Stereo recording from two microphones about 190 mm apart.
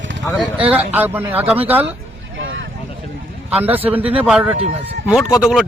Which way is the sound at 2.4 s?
90° right.